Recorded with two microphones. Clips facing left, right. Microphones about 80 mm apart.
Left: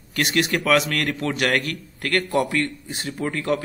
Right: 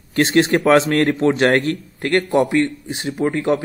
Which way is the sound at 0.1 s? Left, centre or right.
Right.